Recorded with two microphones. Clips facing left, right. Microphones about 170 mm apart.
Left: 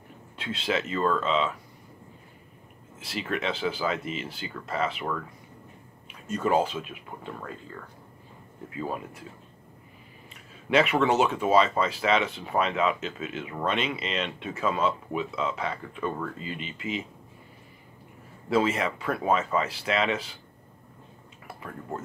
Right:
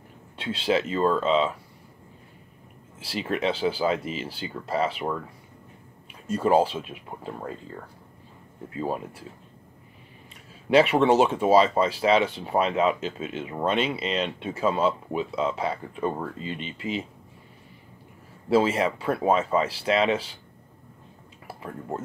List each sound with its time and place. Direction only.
0.4 s speech: 30° right (ahead or behind)
3.0 s speech: 30° right (ahead or behind)
6.2 s speech: 30° right (ahead or behind)
8.6 s speech: 30° right (ahead or behind)
10.7 s speech: 30° right (ahead or behind)
18.5 s speech: 30° right (ahead or behind)
21.5 s speech: 25° right (ahead or behind)